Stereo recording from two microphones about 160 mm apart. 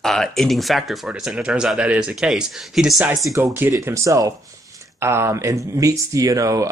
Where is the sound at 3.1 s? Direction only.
20° right (ahead or behind).